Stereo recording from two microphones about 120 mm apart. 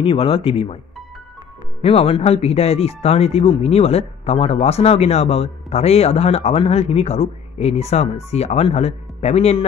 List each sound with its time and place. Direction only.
0.0 s speech: 50° left (ahead or behind)
1.8 s speech: 55° left (ahead or behind)